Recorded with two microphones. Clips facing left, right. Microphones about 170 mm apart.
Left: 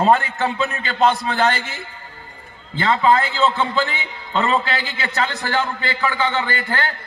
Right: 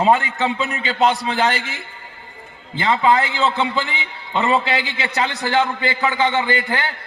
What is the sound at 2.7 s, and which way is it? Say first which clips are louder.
A man's voice: even; 15° right (ahead or behind).